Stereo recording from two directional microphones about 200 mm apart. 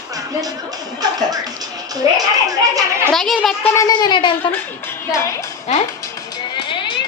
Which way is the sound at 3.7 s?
20° left (ahead or behind).